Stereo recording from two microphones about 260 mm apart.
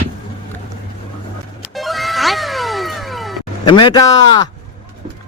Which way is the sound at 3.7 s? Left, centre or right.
Centre.